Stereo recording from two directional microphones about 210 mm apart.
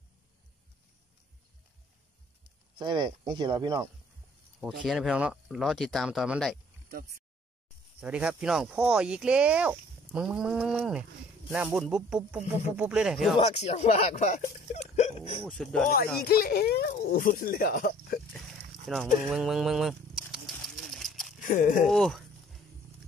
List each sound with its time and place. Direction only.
2.8 s speech: 20° right (ahead or behind)
4.6 s speech: centre (ahead or behind)
8.0 s speech: 5° right (ahead or behind)
13.4 s speech: 30° left (ahead or behind)
15.4 s speech: 5° left (ahead or behind)
16.0 s speech: 50° left (ahead or behind)
18.9 s speech: centre (ahead or behind)
19.2 s bird: centre (ahead or behind)
21.4 s speech: 40° left (ahead or behind)
21.8 s a sound: centre (ahead or behind)